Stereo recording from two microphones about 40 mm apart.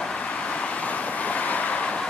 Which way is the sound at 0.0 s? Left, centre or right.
Left.